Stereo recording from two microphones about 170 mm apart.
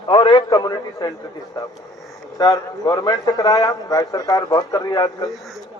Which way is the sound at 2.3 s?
20° left (ahead or behind).